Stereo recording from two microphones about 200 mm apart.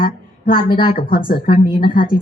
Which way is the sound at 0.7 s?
25° left (ahead or behind).